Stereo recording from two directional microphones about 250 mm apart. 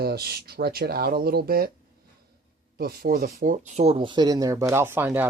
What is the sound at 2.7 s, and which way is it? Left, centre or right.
Speech, right.